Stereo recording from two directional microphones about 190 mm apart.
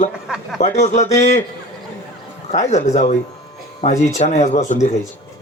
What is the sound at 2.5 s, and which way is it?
Speech, 35° left (ahead or behind).